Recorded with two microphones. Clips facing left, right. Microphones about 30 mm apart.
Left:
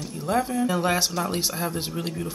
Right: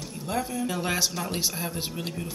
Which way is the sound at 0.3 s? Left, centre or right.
Left.